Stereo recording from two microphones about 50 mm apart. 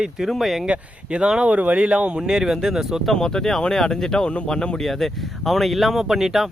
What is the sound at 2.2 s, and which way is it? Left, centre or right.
Speech, centre.